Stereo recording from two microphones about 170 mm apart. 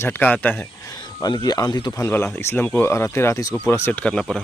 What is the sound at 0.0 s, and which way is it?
Speech, 10° left (ahead or behind).